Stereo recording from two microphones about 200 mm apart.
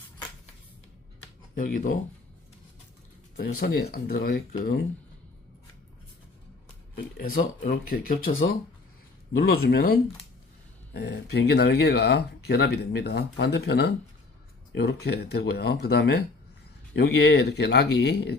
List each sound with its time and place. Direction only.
1.5 s speech: 45° left (ahead or behind)
3.6 s speech: 50° left (ahead or behind)
7.2 s speech: 45° left (ahead or behind)
9.3 s speech: 50° left (ahead or behind)